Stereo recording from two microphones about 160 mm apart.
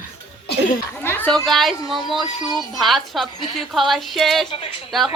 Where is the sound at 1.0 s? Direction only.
10° left (ahead or behind).